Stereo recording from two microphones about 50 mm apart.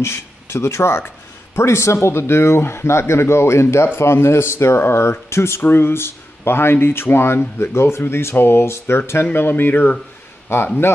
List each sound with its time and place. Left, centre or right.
0.0 s speech: left
5.6 s speech: left
10.5 s speech: left